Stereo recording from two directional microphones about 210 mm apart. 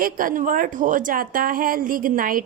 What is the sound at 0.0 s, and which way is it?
A woman's voice, 40° right (ahead or behind).